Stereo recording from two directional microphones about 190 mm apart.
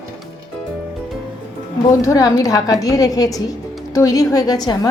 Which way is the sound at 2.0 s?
20° left (ahead or behind).